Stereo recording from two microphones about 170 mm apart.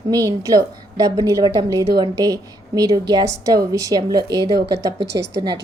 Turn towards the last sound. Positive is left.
turn(degrees=-25)  # may be behind; listen again after turning